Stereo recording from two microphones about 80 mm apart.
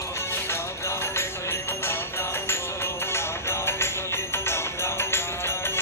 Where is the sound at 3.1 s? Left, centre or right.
Left.